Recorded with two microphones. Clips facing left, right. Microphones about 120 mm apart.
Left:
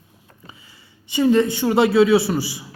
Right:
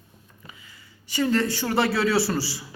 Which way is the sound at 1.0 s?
20° left (ahead or behind).